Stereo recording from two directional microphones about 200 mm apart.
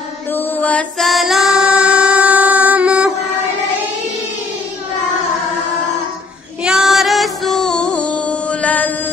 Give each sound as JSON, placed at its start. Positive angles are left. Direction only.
{"t": 0.3, "sound": "female singing", "side_deg": 10}
{"t": 6.6, "sound": "music", "side_deg": 0}